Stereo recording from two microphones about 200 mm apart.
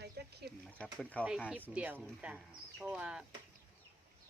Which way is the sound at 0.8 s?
5° left (ahead or behind).